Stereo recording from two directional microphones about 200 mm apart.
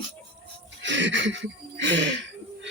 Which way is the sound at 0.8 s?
65° right (ahead or behind).